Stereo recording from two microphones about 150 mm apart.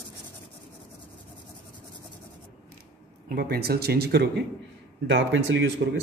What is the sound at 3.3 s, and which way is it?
Speech, 90° right.